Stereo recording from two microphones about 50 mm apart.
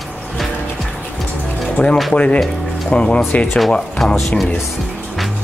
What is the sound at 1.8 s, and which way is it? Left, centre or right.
Speech, left.